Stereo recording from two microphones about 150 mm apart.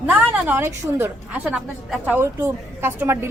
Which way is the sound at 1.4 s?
Centre (ahead or behind).